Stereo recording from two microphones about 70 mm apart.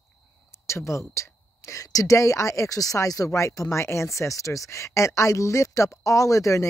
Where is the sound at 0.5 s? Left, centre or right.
Left.